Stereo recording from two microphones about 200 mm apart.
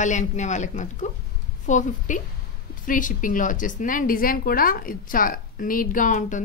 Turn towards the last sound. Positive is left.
turn(degrees=40)  # may be behind; listen again after turning